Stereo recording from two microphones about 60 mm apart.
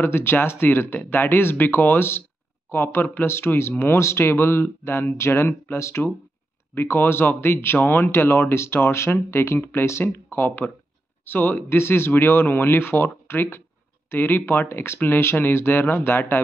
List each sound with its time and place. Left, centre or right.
0.0 s speech: left
6.7 s speech: left